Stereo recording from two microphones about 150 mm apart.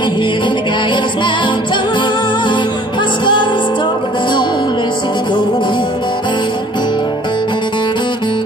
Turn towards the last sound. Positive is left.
turn(degrees=30)  # may be behind; listen again after turning